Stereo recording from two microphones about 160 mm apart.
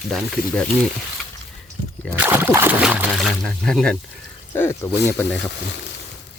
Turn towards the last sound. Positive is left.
turn(degrees=10)  # may be behind; listen again after turning